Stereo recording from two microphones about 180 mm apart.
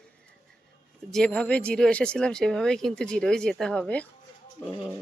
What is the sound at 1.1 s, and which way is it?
Speech, 5° left (ahead or behind).